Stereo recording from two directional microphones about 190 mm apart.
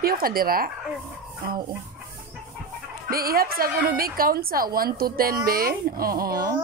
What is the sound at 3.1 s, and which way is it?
A woman's voice, 50° right (ahead or behind).